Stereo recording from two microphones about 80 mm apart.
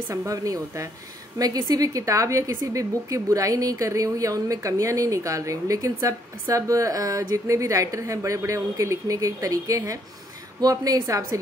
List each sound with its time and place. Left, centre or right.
0.3 s a woman's voice: right